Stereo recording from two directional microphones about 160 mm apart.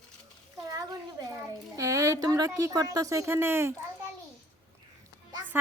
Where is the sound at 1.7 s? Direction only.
20° right (ahead or behind).